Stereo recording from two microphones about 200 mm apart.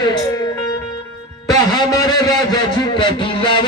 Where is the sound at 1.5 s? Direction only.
20° left (ahead or behind).